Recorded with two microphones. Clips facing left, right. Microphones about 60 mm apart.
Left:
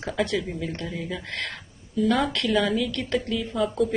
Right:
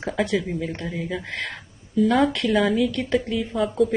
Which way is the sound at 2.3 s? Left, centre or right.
Right.